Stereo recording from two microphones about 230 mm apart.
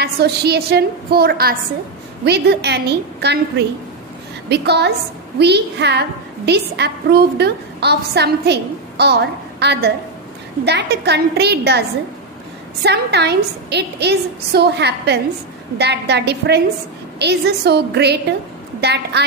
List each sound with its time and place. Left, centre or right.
0.0 s a woman's voice: right
12.8 s a woman's voice: right